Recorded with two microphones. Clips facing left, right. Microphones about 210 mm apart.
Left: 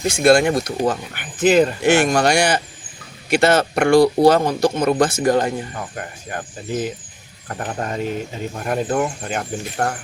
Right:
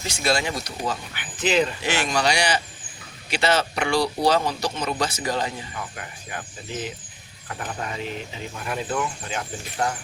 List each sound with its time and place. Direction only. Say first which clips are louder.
0.0 s speech: left 11 dB; 55° left (ahead or behind)
7.4 s speech: left 6 dB; 45° left (ahead or behind)